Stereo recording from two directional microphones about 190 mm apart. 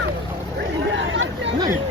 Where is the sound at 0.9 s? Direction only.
75° right (ahead or behind).